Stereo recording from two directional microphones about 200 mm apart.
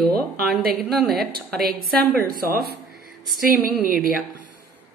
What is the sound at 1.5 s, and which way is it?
Speech, 50° right (ahead or behind).